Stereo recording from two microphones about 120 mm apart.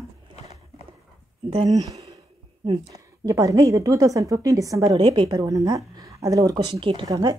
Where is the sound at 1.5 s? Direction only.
60° right (ahead or behind).